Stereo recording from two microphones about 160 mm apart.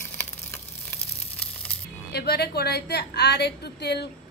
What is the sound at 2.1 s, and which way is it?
A woman's voice, 85° left.